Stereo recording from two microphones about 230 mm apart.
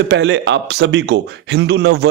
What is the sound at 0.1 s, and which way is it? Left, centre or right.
A man's voice, right.